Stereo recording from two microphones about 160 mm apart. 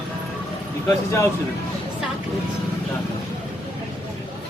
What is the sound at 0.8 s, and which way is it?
Speech, 20° left (ahead or behind).